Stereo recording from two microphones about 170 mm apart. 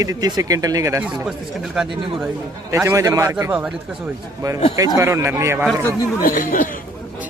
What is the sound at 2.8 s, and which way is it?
Speech, 20° right (ahead or behind).